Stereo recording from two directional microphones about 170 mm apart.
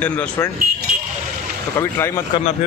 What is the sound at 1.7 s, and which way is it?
Speech, 15° left (ahead or behind).